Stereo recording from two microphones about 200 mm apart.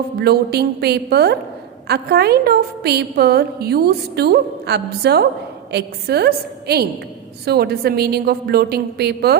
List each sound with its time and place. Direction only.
0.2 s a woman's voice: 55° right (ahead or behind)